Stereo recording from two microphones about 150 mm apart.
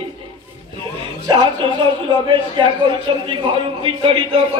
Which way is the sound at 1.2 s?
30° right (ahead or behind).